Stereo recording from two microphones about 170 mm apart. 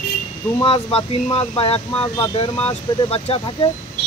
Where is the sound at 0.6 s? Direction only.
35° left (ahead or behind).